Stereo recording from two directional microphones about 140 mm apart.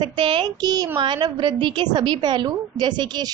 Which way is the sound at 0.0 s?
35° right (ahead or behind).